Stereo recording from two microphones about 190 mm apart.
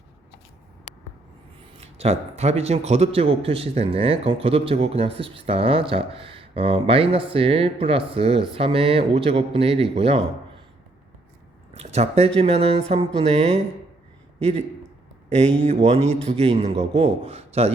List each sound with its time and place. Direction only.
1.8 s a man's voice: 35° right (ahead or behind)
11.7 s a man's voice: 35° right (ahead or behind)